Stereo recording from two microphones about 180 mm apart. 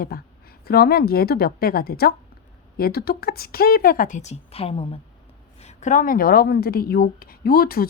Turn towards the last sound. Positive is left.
turn(degrees=55)  # may be behind; listen again after turning